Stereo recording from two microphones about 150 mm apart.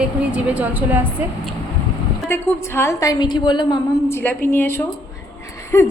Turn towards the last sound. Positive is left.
turn(degrees=20)  # may be behind; listen again after turning